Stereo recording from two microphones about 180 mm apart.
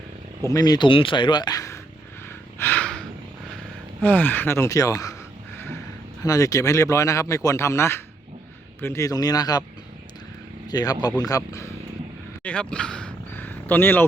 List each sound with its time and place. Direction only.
0.4 s speech: 20° left (ahead or behind)
2.6 s gasp: 10° left (ahead or behind)
4.0 s speech: 10° left (ahead or behind)
6.2 s speech: 20° left (ahead or behind)
10.7 s speech: 20° left (ahead or behind)
12.4 s a sound: 5° left (ahead or behind)